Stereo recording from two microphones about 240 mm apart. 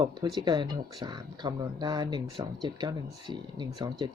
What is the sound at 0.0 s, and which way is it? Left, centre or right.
Speech, centre.